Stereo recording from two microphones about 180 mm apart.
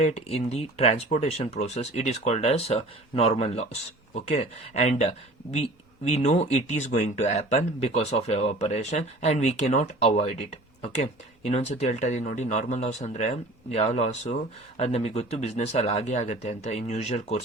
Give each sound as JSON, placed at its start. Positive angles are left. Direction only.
{"t": 0.0, "sound": "speech", "side_deg": 35}
{"t": 6.1, "sound": "speech", "side_deg": 35}